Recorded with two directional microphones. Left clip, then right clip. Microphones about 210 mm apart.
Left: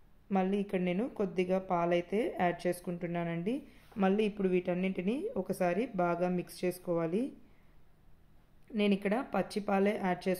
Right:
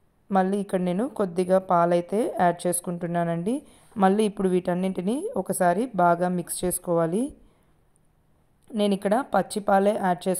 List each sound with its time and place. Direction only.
0.3 s a woman's voice: 35° right (ahead or behind)
8.7 s a woman's voice: 35° right (ahead or behind)